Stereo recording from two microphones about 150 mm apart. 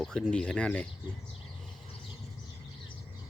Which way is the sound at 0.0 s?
5° left (ahead or behind).